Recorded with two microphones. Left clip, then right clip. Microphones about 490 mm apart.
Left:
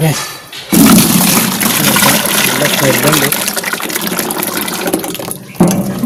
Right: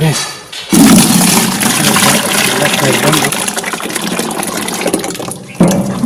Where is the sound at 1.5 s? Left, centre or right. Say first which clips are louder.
Right 1 dB; left.